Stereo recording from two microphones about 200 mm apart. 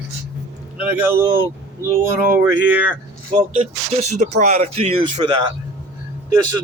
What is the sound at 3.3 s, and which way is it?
Speech, 30° right (ahead or behind).